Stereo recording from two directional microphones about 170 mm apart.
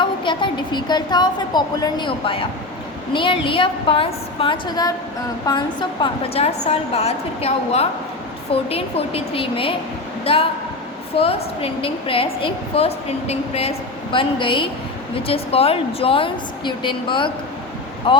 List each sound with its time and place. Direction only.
0.0 s a woman's voice: 30° left (ahead or behind)